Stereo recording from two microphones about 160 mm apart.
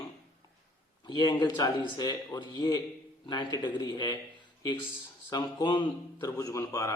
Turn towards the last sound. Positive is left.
turn(degrees=20)  # may be behind; listen again after turning